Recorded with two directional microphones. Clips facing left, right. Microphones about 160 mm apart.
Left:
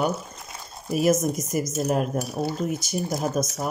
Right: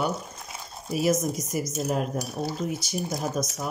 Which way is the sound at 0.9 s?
50° left (ahead or behind).